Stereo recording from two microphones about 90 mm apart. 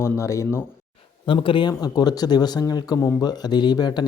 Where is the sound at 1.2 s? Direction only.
75° left (ahead or behind).